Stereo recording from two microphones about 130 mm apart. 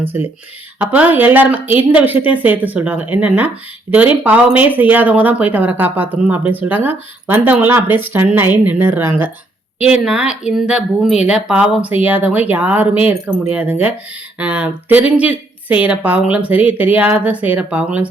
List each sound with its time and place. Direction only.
0.0 s speech: 15° right (ahead or behind)
9.8 s speech: 5° right (ahead or behind)